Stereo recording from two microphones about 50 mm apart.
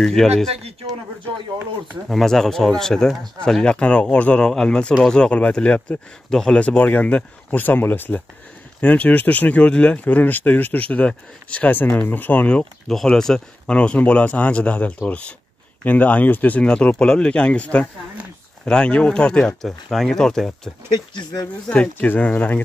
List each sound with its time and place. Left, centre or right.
0.0 s speech: centre
2.0 s speech: centre; by 4.4 s left
4.4 s speech: centre
6.7 s speech: left
8.8 s speech: left
9.6 s speech: left
10.0 s speech: left
11.7 s speech: left
12.8 s speech: centre
13.7 s speech: left
16.6 s speech: left
19.9 s speech: centre
21.6 s speech: left